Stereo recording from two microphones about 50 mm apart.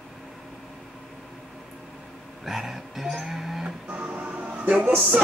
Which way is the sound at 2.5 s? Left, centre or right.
Centre.